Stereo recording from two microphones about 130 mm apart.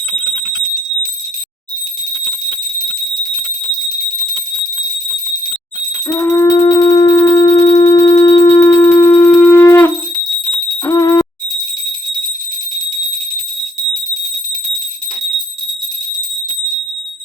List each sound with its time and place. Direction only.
6.1 s music: 25° left (ahead or behind)
9.5 s wind instrument: 15° left (ahead or behind)
10.8 s a sound: 25° left (ahead or behind)